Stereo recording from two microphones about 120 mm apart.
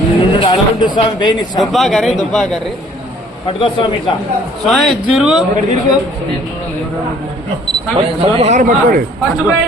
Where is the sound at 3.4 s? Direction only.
45° left (ahead or behind).